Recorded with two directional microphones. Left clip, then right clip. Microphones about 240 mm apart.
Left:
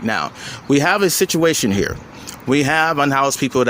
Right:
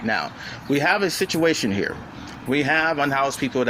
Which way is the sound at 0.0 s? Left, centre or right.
Left.